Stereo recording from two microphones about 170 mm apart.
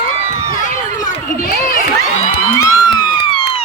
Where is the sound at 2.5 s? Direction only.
20° left (ahead or behind).